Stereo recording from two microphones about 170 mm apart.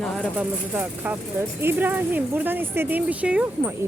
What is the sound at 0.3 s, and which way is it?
Speech, 10° right (ahead or behind).